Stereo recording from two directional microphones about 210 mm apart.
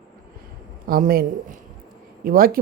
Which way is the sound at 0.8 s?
45° right (ahead or behind).